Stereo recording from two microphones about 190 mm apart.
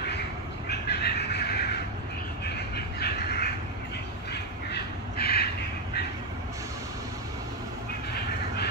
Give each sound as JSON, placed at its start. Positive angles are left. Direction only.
{"t": 0.7, "sound": "bird", "side_deg": 60}